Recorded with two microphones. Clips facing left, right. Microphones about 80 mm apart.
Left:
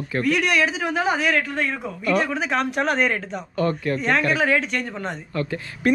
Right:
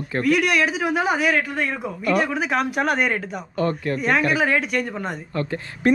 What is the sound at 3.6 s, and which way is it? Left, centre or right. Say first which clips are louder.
Speech: even; right.